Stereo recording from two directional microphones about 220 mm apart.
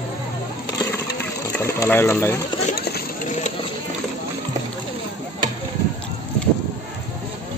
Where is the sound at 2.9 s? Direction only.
45° left (ahead or behind).